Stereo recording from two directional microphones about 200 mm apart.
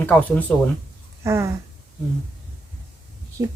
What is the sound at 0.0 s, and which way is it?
Speech, 10° left (ahead or behind).